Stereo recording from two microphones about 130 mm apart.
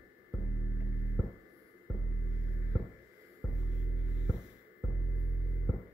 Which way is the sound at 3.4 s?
5° left (ahead or behind).